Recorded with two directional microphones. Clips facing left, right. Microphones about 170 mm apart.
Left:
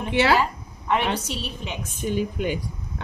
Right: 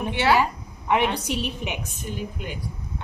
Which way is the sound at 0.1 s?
90° left.